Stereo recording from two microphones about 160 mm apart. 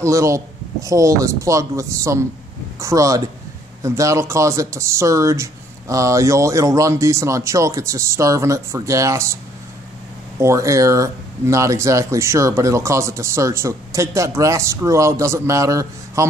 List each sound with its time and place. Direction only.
0.0 s speech: 20° right (ahead or behind)
10.4 s speech: 20° right (ahead or behind)